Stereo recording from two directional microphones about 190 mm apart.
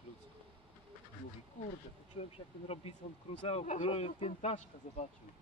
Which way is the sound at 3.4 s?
35° left (ahead or behind).